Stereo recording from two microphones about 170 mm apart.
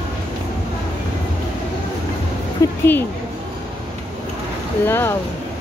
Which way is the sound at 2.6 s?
20° left (ahead or behind).